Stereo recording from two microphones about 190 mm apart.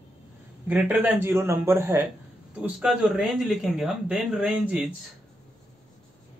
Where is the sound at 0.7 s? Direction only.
10° right (ahead or behind).